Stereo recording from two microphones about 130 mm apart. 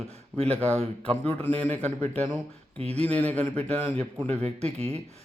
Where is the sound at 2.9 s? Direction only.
10° left (ahead or behind).